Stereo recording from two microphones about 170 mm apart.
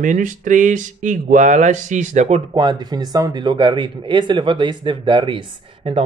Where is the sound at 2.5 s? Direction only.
25° right (ahead or behind).